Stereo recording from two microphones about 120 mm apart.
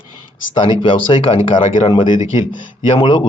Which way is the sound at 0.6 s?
45° left (ahead or behind).